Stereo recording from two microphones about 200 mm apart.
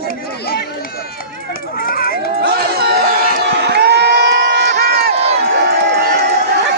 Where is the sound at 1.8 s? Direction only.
45° left (ahead or behind).